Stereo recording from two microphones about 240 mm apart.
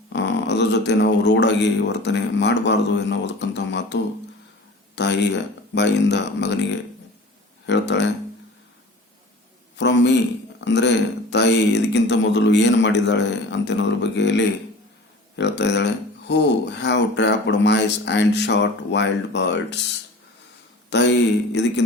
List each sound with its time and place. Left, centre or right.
0.1 s speech: left
7.7 s speech: left
9.7 s speech: left
20.9 s speech: left